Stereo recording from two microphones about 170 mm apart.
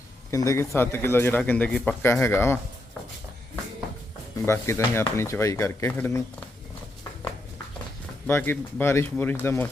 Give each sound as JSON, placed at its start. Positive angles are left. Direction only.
{"t": 0.3, "sound": "a man's voice", "side_deg": 20}
{"t": 4.4, "sound": "a man's voice", "side_deg": 15}
{"t": 8.3, "sound": "a man's voice", "side_deg": 15}